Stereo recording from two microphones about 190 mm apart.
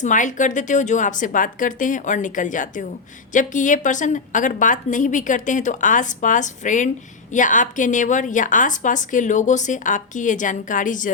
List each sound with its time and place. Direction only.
0.0 s a woman's voice: 40° left (ahead or behind)